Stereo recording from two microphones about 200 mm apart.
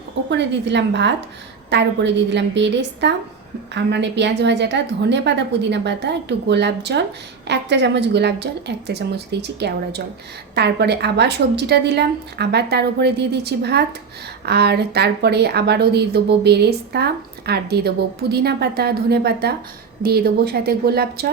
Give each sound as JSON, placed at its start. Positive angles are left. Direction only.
{"t": 0.3, "sound": "a woman's voice", "side_deg": -60}